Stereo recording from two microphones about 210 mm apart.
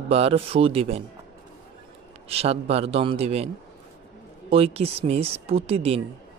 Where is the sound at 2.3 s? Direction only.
30° right (ahead or behind).